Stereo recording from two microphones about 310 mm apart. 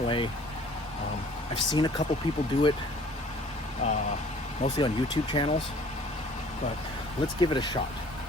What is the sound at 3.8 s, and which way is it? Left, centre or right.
Speech, left.